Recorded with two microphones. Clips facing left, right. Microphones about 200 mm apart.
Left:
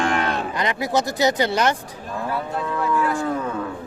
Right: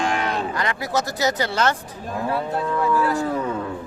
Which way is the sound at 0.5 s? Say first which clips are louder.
Left 2 dB; 20° left (ahead or behind).